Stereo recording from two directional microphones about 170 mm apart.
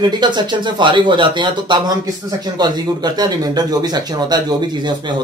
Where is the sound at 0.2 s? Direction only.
25° right (ahead or behind).